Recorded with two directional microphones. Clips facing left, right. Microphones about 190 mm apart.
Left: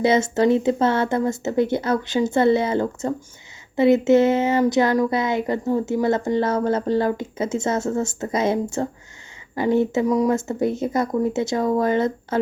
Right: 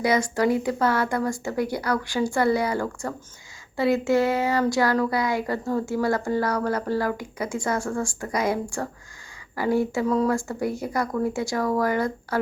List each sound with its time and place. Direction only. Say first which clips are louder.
0.0 s speech: left 4 dB; 25° left (ahead or behind)